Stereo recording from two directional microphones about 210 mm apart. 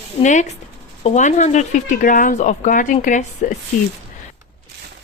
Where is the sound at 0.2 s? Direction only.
35° left (ahead or behind).